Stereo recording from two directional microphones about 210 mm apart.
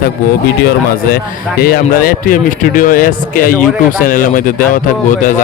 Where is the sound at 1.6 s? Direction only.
45° left (ahead or behind).